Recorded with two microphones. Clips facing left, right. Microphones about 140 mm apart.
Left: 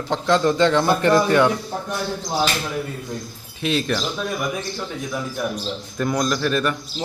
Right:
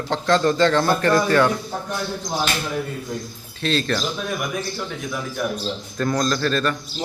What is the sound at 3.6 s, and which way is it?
Speech, 15° left (ahead or behind).